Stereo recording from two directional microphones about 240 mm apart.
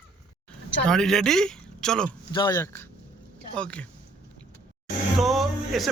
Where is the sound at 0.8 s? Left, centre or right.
Centre.